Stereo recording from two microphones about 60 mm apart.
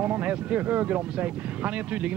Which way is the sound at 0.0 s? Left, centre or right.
Right.